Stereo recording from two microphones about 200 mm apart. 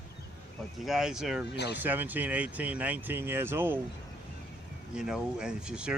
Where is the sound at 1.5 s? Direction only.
55° left (ahead or behind).